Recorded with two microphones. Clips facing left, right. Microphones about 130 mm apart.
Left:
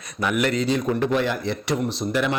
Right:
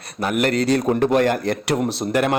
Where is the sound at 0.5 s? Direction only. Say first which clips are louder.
Right 4 dB; 75° right (ahead or behind).